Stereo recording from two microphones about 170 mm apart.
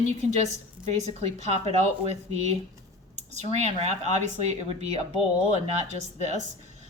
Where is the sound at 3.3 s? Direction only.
40° right (ahead or behind).